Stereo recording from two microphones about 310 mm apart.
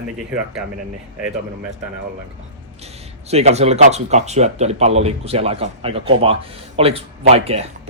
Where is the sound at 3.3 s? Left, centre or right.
Centre.